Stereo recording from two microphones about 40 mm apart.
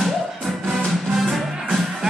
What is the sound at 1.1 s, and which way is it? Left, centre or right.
Music, centre.